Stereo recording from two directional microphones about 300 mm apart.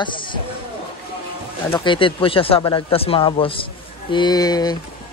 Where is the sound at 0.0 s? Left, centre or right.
Centre.